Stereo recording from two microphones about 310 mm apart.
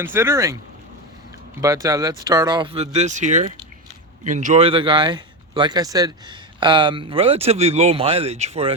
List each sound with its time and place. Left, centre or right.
0.0 s speech: centre
1.6 s speech: centre